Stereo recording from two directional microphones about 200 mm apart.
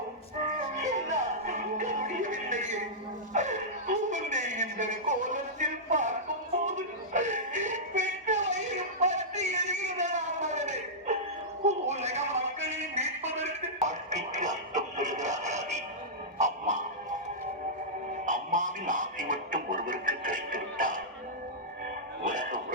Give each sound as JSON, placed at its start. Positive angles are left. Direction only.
{"t": 1.0, "sound": "music", "side_deg": -35}
{"t": 3.3, "sound": "a sound", "side_deg": -35}
{"t": 6.7, "sound": "music", "side_deg": -35}
{"t": 11.6, "sound": "a sound", "side_deg": -35}
{"t": 18.3, "sound": "music", "side_deg": -40}
{"t": 22.2, "sound": "music", "side_deg": -40}